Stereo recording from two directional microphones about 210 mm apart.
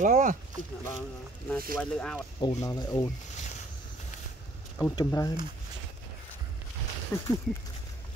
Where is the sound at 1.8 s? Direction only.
5° left (ahead or behind).